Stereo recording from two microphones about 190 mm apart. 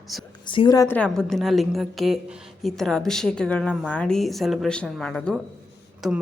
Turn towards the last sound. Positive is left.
turn(degrees=0)  # may be behind; listen again after turning